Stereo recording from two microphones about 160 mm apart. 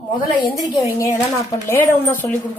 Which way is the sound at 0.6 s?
25° left (ahead or behind).